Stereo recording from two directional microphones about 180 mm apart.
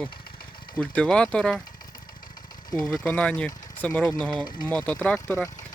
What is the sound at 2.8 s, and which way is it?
Speech, 5° left (ahead or behind).